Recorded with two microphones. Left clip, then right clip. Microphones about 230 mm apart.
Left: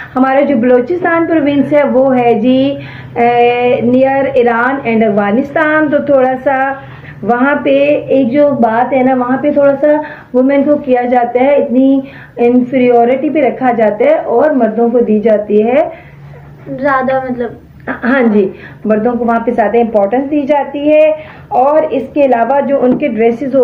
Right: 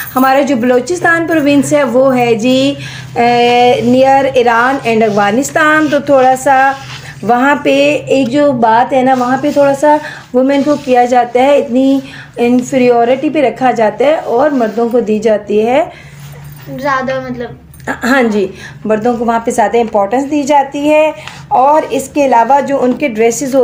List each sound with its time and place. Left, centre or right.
0.1 s speech: right
16.7 s a woman's voice: centre
17.8 s speech: right